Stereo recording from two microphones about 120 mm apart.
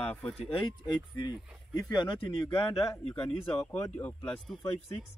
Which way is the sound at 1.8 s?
40° left (ahead or behind).